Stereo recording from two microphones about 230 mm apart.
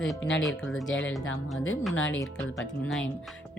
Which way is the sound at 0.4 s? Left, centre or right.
Centre.